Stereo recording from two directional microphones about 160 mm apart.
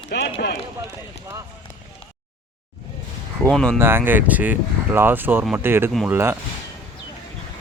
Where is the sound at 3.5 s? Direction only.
5° left (ahead or behind).